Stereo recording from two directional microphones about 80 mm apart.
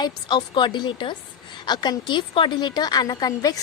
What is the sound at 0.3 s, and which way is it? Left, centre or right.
Speech, left.